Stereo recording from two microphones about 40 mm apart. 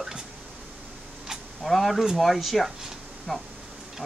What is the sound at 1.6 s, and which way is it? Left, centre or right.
Speech, centre.